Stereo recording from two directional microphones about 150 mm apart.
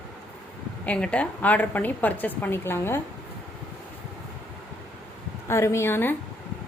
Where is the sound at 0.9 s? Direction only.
10° left (ahead or behind).